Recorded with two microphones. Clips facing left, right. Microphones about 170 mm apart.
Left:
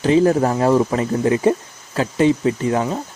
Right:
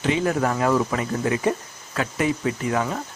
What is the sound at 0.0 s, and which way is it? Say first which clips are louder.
Speech: left 7 dB; 35° left (ahead or behind).